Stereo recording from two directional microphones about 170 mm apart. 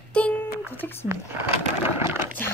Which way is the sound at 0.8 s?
15° left (ahead or behind).